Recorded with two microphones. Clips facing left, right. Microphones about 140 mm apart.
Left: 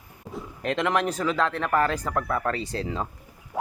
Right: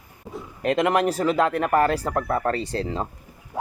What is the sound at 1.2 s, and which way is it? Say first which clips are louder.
Speech: right 4 dB; 40° right (ahead or behind).